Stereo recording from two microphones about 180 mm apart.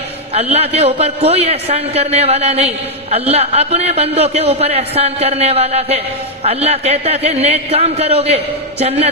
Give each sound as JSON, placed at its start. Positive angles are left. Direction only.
{"t": 0.3, "sound": "a man's voice", "side_deg": -35}